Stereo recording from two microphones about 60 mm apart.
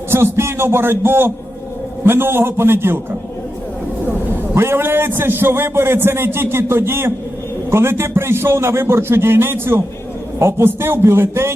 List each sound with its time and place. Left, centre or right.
0.1 s a man's voice: right
4.5 s a man's voice: right